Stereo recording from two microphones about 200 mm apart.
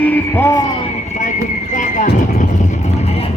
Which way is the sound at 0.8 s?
30° left (ahead or behind).